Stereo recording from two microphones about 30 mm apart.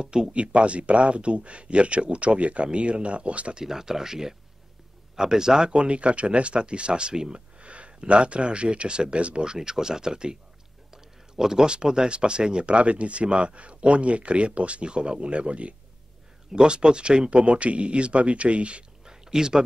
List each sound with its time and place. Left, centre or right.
0.0 s speech: right
0.3 s speech: right
3.5 s speech: centre
5.8 s speech: right
7.6 s a sound: right
8.0 s speech: right
10.9 s a sound: centre
11.6 s speech: right
14.9 s speech: right
16.5 s speech: right
17.4 s speech: right
19.0 s a sound: right